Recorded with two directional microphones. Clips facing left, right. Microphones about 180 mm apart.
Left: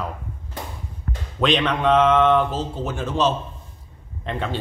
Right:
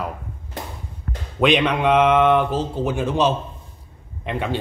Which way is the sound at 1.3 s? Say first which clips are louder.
Right 3 dB; 10° right (ahead or behind).